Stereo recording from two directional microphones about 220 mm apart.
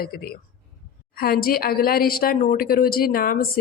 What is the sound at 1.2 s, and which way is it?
A woman's voice, 40° left (ahead or behind).